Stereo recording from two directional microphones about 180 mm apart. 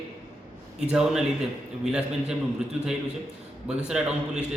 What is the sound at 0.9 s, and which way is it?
A man's voice, 5° right (ahead or behind).